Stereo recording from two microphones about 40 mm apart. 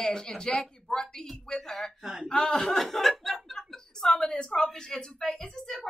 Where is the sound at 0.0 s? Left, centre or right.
Centre.